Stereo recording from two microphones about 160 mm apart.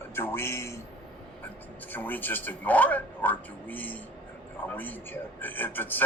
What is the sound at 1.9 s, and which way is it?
A man's voice, 10° left (ahead or behind).